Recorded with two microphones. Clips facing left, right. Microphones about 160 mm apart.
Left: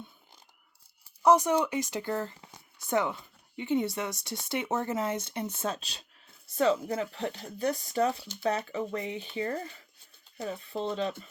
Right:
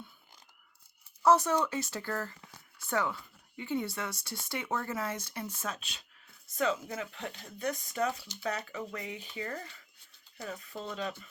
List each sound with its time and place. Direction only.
1.2 s speech: 15° left (ahead or behind)